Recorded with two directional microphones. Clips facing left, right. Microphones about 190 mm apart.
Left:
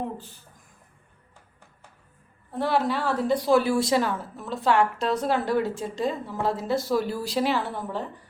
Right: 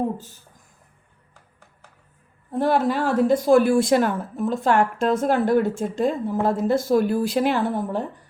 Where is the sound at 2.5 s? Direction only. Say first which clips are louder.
Right 4 dB; 50° right (ahead or behind).